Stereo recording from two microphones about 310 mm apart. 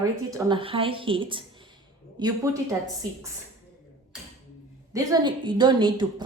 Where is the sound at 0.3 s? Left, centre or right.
Centre.